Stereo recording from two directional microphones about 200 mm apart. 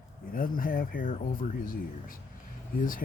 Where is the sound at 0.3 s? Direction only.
45° left (ahead or behind).